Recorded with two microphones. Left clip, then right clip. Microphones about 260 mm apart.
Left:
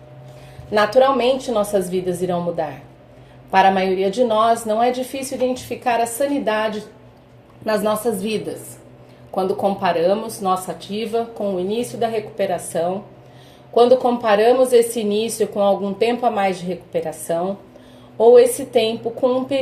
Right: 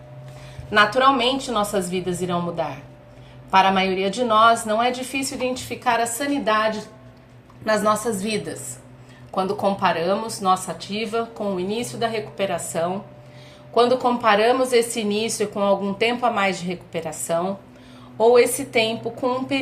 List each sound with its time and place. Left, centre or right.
0.8 s a woman's voice: right